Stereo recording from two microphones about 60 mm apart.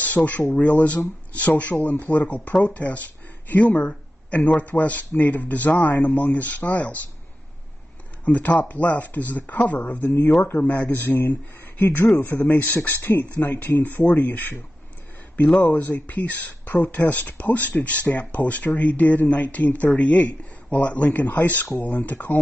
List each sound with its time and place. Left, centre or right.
0.0 s speech: left
8.3 s speech: left
15.6 s speech: left